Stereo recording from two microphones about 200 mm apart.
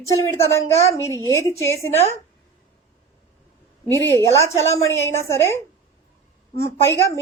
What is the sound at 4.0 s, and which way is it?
A woman's voice, 10° left (ahead or behind).